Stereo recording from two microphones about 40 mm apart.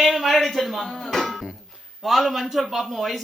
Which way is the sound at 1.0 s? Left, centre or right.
Centre.